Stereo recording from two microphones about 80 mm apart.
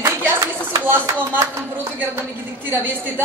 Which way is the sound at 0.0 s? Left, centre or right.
Right.